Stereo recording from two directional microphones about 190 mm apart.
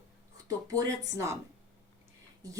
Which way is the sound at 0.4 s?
20° right (ahead or behind).